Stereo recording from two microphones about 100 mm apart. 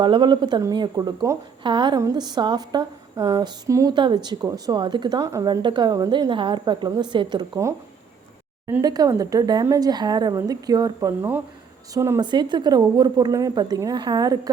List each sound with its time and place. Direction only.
0.0 s a woman's voice: 50° right (ahead or behind); by 1.4 s 35° right (ahead or behind)
1.6 s a woman's voice: 50° right (ahead or behind)
2.0 s a woman's voice: 40° right (ahead or behind)
3.9 s a woman's voice: 50° right (ahead or behind)
5.3 s a woman's voice: 35° right (ahead or behind)
5.6 s a woman's voice: 50° right (ahead or behind)
8.8 s a woman's voice: 40° right (ahead or behind)
12.2 s a woman's voice: 50° right (ahead or behind)